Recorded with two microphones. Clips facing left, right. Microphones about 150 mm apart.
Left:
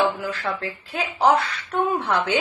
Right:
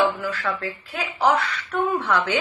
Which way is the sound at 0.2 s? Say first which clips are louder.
Even; 25° left (ahead or behind).